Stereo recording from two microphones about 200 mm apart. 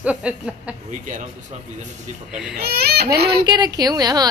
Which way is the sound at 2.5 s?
50° right (ahead or behind).